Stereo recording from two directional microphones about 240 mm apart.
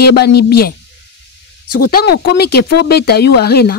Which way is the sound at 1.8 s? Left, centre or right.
Left.